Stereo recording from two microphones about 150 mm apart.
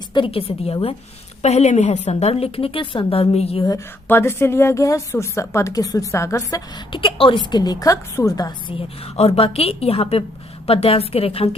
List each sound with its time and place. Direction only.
0.1 s a woman's voice: 35° left (ahead or behind)
4.1 s a woman's voice: 15° left (ahead or behind)
9.1 s a woman's voice: 45° left (ahead or behind)